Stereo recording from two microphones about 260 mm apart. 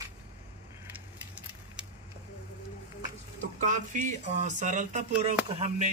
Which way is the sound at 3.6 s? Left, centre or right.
Right.